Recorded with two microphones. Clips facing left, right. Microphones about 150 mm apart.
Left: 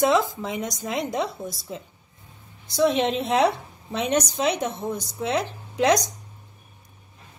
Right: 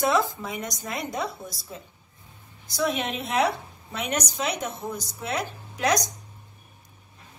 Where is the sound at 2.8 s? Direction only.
30° left (ahead or behind).